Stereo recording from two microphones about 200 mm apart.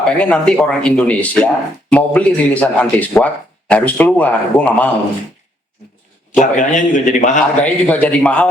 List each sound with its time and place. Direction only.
0.0 s speech: 5° left (ahead or behind)
6.4 s a man's voice: 40° left (ahead or behind)
7.6 s speech: 5° left (ahead or behind)